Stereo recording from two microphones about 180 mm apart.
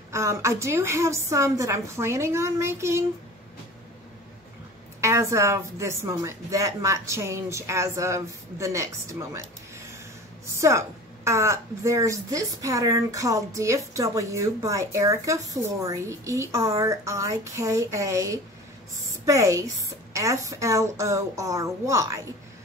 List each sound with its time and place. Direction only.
0.1 s a woman's voice: 15° right (ahead or behind)
5.0 s a woman's voice: 15° right (ahead or behind)